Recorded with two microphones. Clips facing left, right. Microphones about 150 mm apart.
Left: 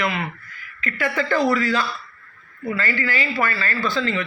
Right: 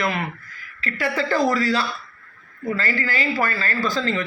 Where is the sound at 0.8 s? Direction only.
35° right (ahead or behind).